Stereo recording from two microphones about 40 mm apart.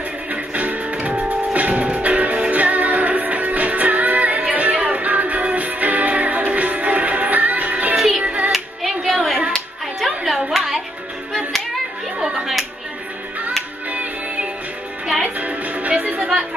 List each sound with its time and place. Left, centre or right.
0.3 s music: right
8.5 s music: centre
9.9 s a sound: centre
13.8 s music: right